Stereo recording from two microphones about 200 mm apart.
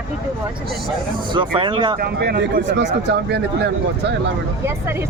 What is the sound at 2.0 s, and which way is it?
Speech, 50° right (ahead or behind).